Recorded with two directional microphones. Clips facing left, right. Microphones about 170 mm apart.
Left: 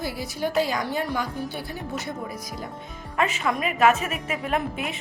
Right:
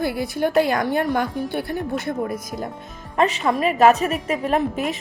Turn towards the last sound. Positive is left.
turn(degrees=-35)  # may be behind; listen again after turning